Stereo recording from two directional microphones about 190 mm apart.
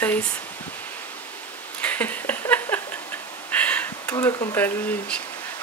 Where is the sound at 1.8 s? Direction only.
10° left (ahead or behind).